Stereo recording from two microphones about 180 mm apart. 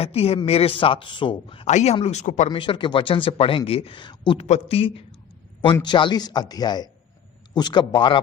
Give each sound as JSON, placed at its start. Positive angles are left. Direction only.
{"t": 0.0, "sound": "speech", "side_deg": 35}
{"t": 2.5, "sound": "speech", "side_deg": 30}